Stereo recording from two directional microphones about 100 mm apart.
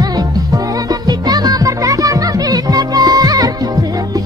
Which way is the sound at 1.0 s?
40° right (ahead or behind).